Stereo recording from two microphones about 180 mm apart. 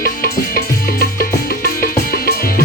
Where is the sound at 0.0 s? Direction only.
55° left (ahead or behind).